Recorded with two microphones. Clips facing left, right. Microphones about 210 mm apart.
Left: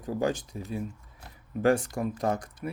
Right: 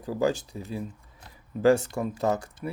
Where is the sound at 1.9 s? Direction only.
25° right (ahead or behind).